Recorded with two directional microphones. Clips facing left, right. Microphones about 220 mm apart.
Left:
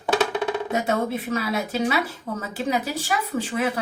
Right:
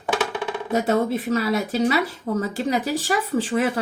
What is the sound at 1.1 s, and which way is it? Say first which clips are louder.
A woman's voice: right 4 dB; 45° right (ahead or behind).